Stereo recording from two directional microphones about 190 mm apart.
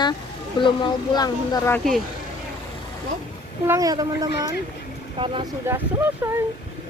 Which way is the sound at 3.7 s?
20° right (ahead or behind).